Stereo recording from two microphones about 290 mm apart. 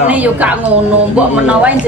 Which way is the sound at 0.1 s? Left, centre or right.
Centre.